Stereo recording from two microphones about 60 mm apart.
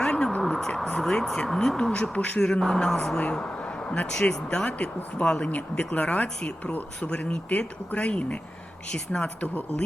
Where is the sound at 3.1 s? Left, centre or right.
Centre.